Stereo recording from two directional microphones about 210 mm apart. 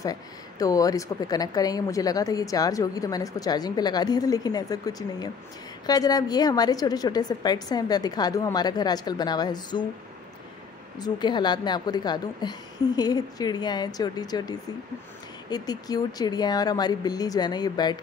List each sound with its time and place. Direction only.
0.0 s a woman's voice: 15° left (ahead or behind)
11.0 s a woman's voice: 20° left (ahead or behind)
15.5 s a woman's voice: 20° left (ahead or behind)